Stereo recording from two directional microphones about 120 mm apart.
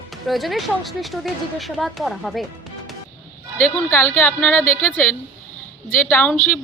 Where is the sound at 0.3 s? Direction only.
Centre (ahead or behind).